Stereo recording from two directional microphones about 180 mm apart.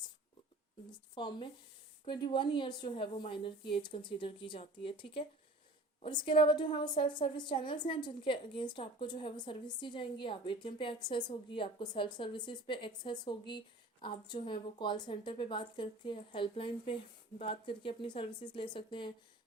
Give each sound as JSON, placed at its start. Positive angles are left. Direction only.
{"t": 0.9, "sound": "a woman's voice", "side_deg": 25}